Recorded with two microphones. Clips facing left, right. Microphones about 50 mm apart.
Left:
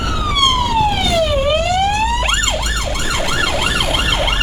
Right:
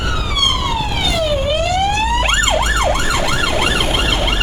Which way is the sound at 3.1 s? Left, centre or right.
Centre.